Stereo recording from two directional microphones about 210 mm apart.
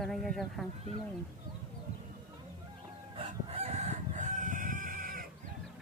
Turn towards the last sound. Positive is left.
turn(degrees=-40)  # may be behind; listen again after turning